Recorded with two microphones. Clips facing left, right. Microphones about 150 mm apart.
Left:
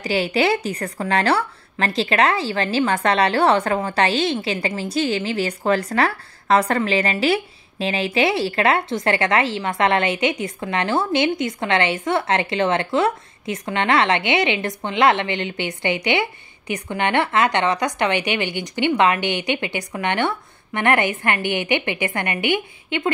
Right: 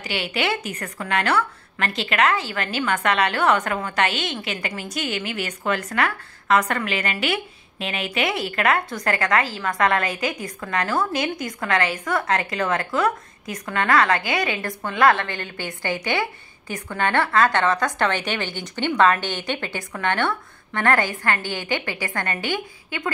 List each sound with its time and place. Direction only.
0.0 s a woman's voice: 35° left (ahead or behind); by 23.0 s 20° left (ahead or behind)